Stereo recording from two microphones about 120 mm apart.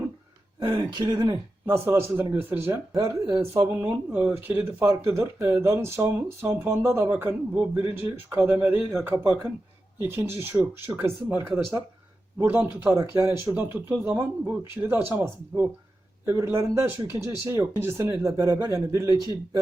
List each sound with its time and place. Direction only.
0.6 s speech: 40° right (ahead or behind)
1.6 s speech: 20° right (ahead or behind)